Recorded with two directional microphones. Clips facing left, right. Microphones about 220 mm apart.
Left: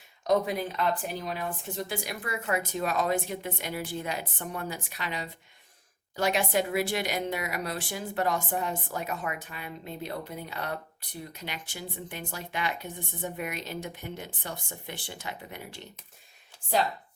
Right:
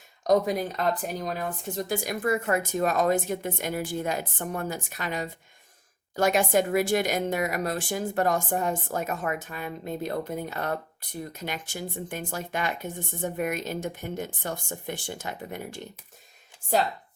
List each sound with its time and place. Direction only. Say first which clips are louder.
0.3 s speech: right 3 dB; 40° right (ahead or behind)